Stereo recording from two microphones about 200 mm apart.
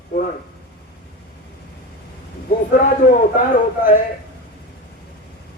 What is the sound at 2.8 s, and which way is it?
A man's voice, 40° left (ahead or behind).